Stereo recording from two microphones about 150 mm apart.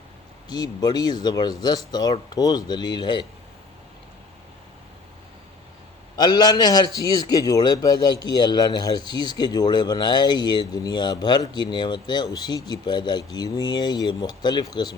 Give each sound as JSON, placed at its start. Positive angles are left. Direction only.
{"t": 0.4, "sound": "a man's voice", "side_deg": 30}
{"t": 6.1, "sound": "a man's voice", "side_deg": 30}